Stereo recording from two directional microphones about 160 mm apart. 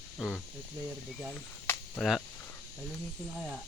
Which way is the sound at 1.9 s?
Centre (ahead or behind).